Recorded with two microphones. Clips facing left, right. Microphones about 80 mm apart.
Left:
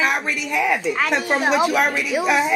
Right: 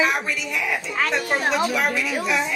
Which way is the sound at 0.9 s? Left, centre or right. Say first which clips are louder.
Left 2 dB; centre.